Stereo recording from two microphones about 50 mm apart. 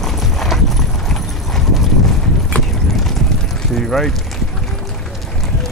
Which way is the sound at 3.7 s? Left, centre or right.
Centre.